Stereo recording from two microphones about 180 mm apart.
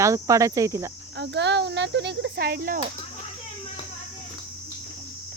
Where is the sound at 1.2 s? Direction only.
75° right (ahead or behind); by 2.8 s 55° right (ahead or behind).